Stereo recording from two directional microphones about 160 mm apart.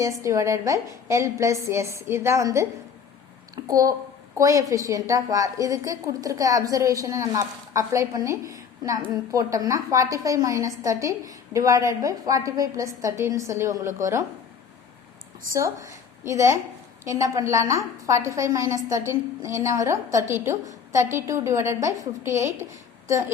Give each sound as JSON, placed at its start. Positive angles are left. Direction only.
{"t": 0.2, "sound": "a woman's voice", "side_deg": -20}
{"t": 15.5, "sound": "a woman's voice", "side_deg": -20}